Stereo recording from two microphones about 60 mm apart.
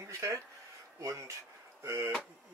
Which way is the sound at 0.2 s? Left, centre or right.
Right.